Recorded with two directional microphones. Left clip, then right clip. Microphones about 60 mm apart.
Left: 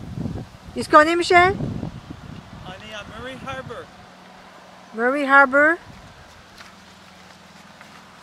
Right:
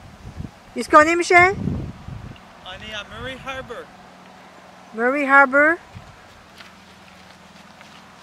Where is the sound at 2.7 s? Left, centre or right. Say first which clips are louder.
Right 3 dB; right.